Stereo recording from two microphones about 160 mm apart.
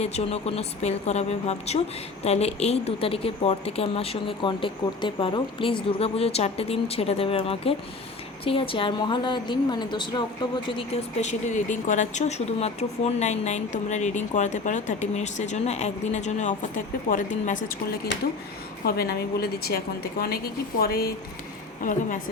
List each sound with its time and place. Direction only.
0.0 s a woman's voice: 45° left (ahead or behind)
10.8 s speech: 45° left (ahead or behind); by 18.1 s 60° left (ahead or behind)
18.9 s a woman's voice: 75° left (ahead or behind)
21.8 s a woman's voice: 55° left (ahead or behind)